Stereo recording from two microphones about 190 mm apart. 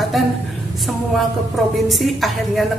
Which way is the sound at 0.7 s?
Centre (ahead or behind).